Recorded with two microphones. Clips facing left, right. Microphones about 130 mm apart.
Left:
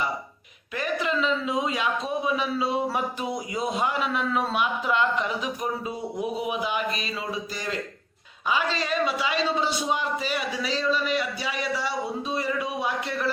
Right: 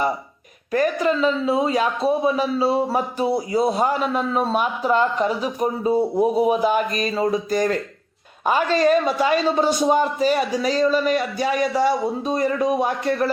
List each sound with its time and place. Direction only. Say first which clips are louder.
0.7 s a man's voice: right 8 dB; 40° right (ahead or behind)